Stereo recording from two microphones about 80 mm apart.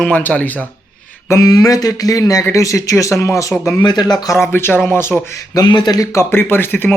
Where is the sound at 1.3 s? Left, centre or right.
Left.